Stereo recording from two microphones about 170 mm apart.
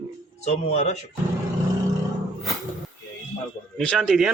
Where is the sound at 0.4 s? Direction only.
40° left (ahead or behind).